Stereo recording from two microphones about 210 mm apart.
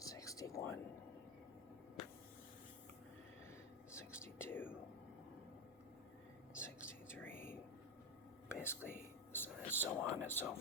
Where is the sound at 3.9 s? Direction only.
10° left (ahead or behind).